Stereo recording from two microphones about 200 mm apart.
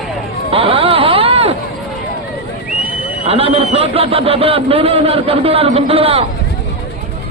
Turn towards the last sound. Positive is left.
turn(degrees=-30)  # may be behind; listen again after turning